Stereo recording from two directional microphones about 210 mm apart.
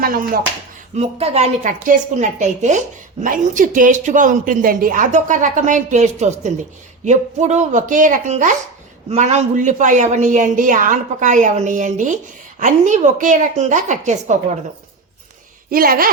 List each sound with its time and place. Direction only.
0.0 s speech: 40° right (ahead or behind)
0.9 s a woman's voice: 30° right (ahead or behind)
15.7 s speech: 45° right (ahead or behind)